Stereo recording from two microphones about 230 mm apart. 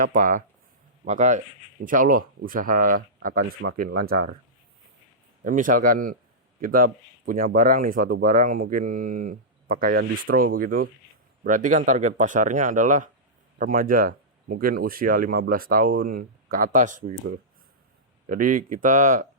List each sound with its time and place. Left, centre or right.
0.0 s speech: right
5.4 s speech: right
18.3 s speech: right